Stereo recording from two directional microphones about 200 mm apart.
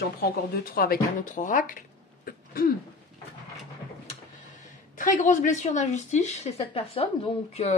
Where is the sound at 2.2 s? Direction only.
45° left (ahead or behind).